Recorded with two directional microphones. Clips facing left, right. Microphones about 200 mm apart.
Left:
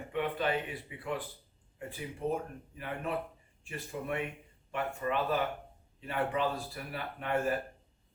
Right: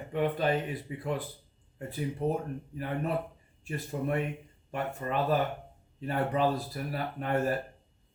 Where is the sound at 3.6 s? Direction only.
40° right (ahead or behind).